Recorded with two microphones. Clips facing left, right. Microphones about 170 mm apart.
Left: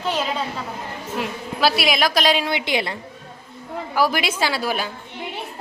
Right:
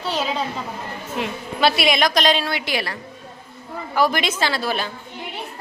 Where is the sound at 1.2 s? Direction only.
Centre (ahead or behind).